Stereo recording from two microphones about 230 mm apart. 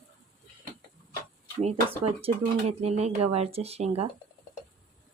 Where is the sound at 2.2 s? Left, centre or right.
Right.